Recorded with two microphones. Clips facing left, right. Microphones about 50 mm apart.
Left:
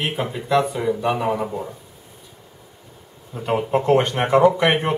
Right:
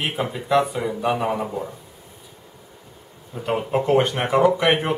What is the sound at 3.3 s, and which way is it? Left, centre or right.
Speech, centre.